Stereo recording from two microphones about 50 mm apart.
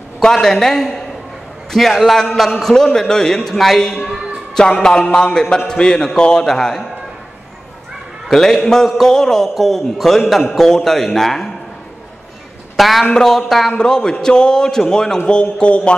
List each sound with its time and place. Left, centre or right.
0.2 s a man's voice: centre
8.3 s a man's voice: centre
12.7 s speech: centre
13.1 s a man's voice: centre
15.6 s a sound: left